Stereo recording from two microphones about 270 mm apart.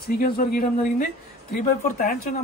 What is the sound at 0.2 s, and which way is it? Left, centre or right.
Speech, left.